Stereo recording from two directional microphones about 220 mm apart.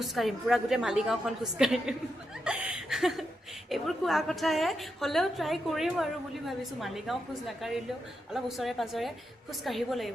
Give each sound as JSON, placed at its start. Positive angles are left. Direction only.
{"t": 0.0, "sound": "a woman's voice", "side_deg": 0}